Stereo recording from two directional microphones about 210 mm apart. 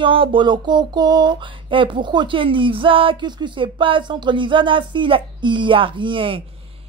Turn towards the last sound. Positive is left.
turn(degrees=-25)  # may be behind; listen again after turning